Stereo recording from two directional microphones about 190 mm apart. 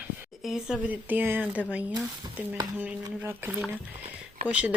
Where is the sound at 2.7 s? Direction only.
5° right (ahead or behind).